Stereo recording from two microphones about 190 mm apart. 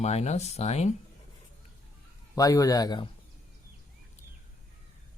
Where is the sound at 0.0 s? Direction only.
35° left (ahead or behind).